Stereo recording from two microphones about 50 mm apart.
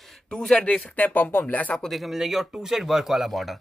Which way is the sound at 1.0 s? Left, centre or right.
Left.